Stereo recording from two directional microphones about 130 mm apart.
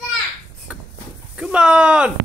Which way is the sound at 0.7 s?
10° right (ahead or behind).